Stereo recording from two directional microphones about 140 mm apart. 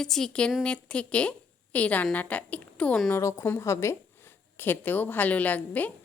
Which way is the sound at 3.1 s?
20° left (ahead or behind).